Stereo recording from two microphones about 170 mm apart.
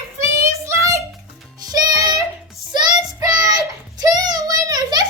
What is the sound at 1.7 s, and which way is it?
Music, 20° right (ahead or behind).